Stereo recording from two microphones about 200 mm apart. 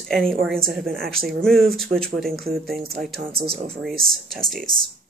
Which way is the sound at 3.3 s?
30° right (ahead or behind).